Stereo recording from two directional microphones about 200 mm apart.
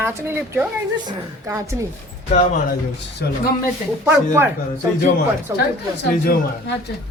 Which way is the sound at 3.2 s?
55° left (ahead or behind).